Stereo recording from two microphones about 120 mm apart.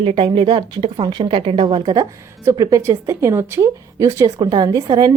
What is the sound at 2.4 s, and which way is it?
A woman's voice, 25° right (ahead or behind).